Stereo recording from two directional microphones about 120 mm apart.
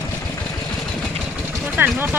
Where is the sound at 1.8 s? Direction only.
15° right (ahead or behind).